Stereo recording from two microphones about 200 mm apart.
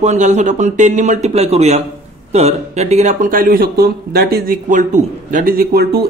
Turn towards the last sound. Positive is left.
turn(degrees=-50)  # may be behind; listen again after turning